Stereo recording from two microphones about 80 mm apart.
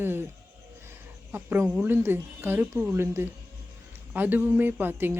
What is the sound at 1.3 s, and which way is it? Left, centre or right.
A woman's voice, right.